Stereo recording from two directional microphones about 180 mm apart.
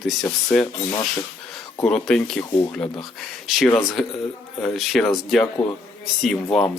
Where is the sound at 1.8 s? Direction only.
5° left (ahead or behind).